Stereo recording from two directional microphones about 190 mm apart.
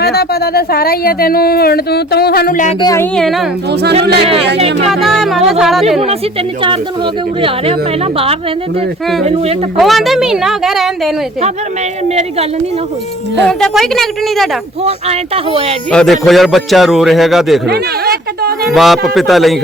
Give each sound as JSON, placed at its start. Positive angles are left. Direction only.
{"t": 0.0, "sound": "speech", "side_deg": 55}
{"t": 2.8, "sound": "speech", "side_deg": 15}
{"t": 3.2, "sound": "a man's voice", "side_deg": 0}
{"t": 4.0, "sound": "speech", "side_deg": -60}
{"t": 4.9, "sound": "a man's voice", "side_deg": 0}
{"t": 7.4, "sound": "speech", "side_deg": -30}
{"t": 9.2, "sound": "speech", "side_deg": -35}
{"t": 9.7, "sound": "a man's voice", "side_deg": 0}
{"t": 12.0, "sound": "speech", "side_deg": -35}
{"t": 13.4, "sound": "a man's voice", "side_deg": 5}
{"t": 14.8, "sound": "speech", "side_deg": -30}
{"t": 15.9, "sound": "a man's voice", "side_deg": 5}
{"t": 17.7, "sound": "speech", "side_deg": -55}
{"t": 18.7, "sound": "a man's voice", "side_deg": 0}